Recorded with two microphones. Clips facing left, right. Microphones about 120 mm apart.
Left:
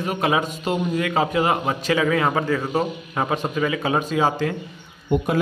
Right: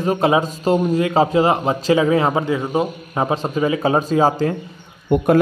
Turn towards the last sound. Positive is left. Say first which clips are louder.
# right 6 dB
turn(degrees=-55)  # may be behind; listen again after turning